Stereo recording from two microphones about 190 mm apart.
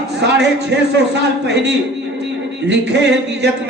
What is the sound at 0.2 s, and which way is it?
Speech, 65° right (ahead or behind).